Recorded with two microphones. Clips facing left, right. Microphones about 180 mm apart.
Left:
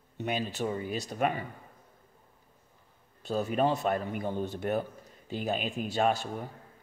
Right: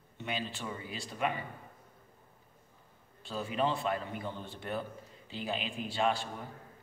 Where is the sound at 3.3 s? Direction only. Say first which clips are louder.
Left 5 dB; 45° left (ahead or behind).